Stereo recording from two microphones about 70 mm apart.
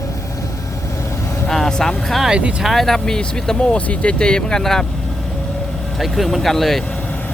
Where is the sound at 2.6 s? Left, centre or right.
Centre.